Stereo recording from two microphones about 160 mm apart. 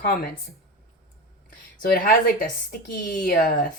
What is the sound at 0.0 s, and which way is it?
Speech, 75° left (ahead or behind).